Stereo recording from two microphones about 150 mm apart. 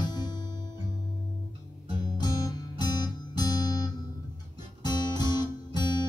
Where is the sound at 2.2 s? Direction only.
30° left (ahead or behind).